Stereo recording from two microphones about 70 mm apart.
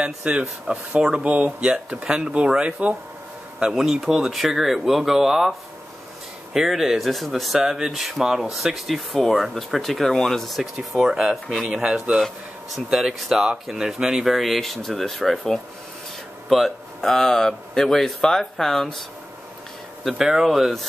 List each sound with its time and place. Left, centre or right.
0.0 s a man's voice: centre
11.7 s speech: centre
20.2 s speech: centre